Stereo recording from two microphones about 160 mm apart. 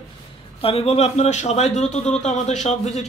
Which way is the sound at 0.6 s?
35° left (ahead or behind).